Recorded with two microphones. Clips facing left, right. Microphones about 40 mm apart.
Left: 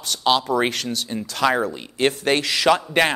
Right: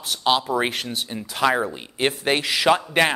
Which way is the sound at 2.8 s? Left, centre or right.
Centre.